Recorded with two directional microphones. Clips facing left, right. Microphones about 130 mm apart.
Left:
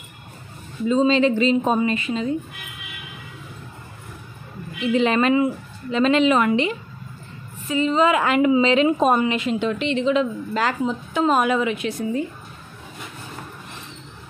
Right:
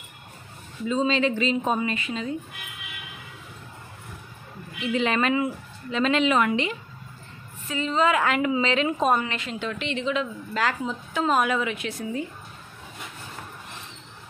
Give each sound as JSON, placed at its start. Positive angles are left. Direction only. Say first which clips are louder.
{"t": 0.8, "sound": "a woman's voice", "louder": "left 6 dB", "side_deg": 30}
{"t": 4.9, "sound": "a woman's voice", "louder": "left 5 dB", "side_deg": 30}
{"t": 7.6, "sound": "a woman's voice", "louder": "left 5 dB", "side_deg": 15}
{"t": 12.0, "sound": "speech", "louder": "left 5 dB", "side_deg": 40}